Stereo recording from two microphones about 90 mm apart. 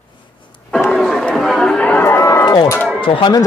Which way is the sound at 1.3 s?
Centre (ahead or behind).